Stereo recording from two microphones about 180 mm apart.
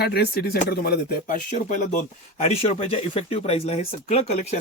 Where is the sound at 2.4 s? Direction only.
35° left (ahead or behind).